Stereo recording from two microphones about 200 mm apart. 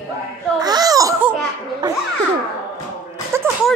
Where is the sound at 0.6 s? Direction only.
20° right (ahead or behind).